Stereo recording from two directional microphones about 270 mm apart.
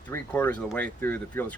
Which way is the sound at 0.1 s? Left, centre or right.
Centre.